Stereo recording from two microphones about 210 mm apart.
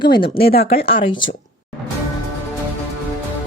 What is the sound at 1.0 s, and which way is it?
Speech, 20° left (ahead or behind).